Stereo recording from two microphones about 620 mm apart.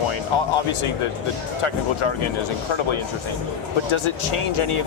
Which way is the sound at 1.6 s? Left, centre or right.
Left.